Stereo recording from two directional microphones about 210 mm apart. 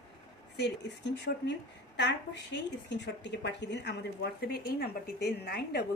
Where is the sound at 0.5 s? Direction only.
55° left (ahead or behind).